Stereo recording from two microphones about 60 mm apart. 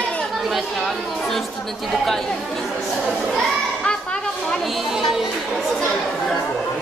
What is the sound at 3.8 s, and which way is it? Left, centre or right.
Children playing, centre.